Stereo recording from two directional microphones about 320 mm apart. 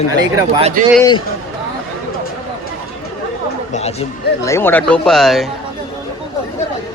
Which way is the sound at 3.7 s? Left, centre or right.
Left.